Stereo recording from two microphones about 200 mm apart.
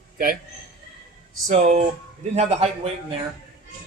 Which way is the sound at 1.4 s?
35° right (ahead or behind).